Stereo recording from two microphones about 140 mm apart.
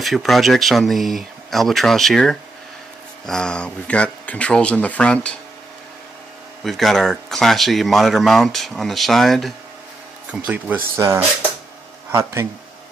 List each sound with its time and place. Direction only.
0.0 s speech: centre (ahead or behind)
6.6 s speech: centre (ahead or behind)
10.3 s speech: 10° right (ahead or behind)